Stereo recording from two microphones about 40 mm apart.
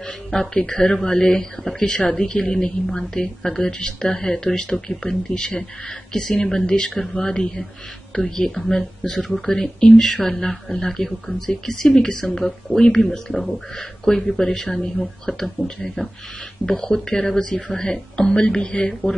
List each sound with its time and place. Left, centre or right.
0.3 s a woman's voice: centre